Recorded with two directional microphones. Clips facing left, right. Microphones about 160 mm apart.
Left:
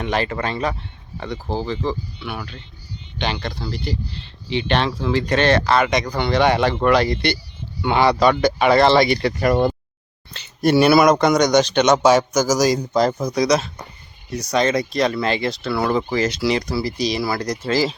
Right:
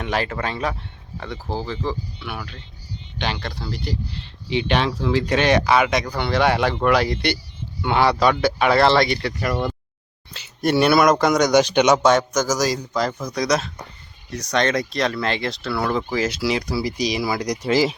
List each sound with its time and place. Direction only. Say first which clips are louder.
0.0 s speech: left 2 dB; 5° right (ahead or behind)
9.4 s speech: left 8 dB; 40° left (ahead or behind)
10.3 s speech: left 3 dB; centre (ahead or behind)
12.0 s a man's voice: left 2 dB; 5° left (ahead or behind)
12.7 s speech: left 5 dB; 25° left (ahead or behind)
13.3 s speech: left 3 dB; 5° left (ahead or behind); by 17.9 s 20° right (ahead or behind)